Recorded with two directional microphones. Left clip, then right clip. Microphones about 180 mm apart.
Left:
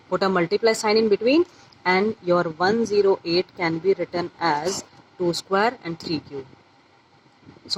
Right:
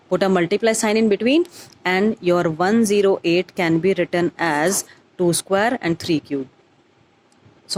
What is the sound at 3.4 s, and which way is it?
Speech, 40° right (ahead or behind).